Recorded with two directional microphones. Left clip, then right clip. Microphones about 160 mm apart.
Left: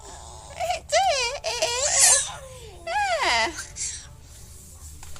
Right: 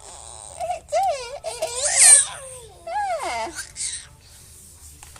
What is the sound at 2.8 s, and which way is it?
Baby cry, centre (ahead or behind).